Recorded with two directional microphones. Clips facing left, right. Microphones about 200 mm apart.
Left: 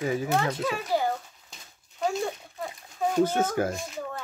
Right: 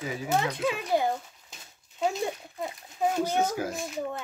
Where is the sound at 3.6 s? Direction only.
55° left (ahead or behind).